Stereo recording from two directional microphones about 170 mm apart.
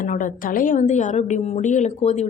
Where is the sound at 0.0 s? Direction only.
50° left (ahead or behind).